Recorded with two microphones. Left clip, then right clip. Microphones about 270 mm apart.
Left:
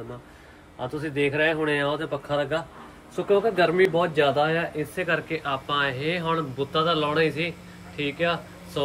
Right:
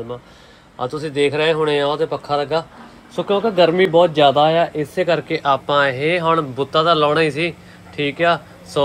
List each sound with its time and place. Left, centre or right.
1.0 s speech: right